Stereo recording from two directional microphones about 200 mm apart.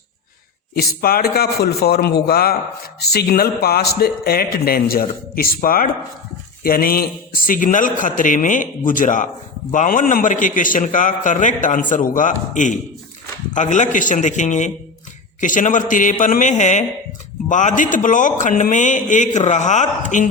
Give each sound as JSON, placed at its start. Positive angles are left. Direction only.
{"t": 0.8, "sound": "a man's voice", "side_deg": 50}